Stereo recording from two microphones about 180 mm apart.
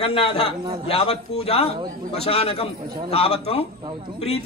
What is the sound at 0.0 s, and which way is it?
A man's voice, 35° left (ahead or behind).